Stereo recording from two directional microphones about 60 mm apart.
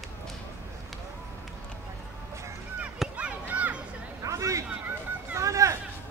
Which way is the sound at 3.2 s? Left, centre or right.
Right.